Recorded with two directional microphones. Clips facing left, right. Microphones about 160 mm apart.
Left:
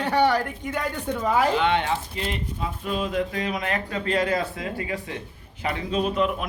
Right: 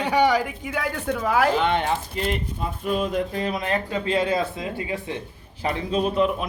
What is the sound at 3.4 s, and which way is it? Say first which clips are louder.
A man's voice: right 2 dB; 30° right (ahead or behind).